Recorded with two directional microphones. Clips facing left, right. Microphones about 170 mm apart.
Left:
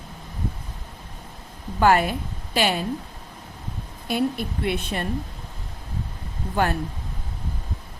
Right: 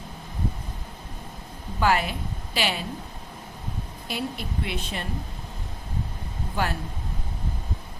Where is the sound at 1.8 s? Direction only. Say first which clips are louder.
Left 5 dB; 50° left (ahead or behind).